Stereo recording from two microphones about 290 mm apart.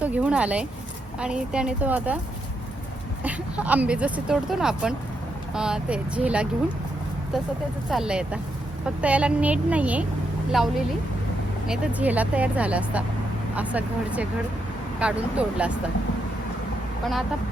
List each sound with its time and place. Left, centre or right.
0.0 s speech: centre
3.2 s speech: centre
7.9 s speech: centre
11.7 s speech: centre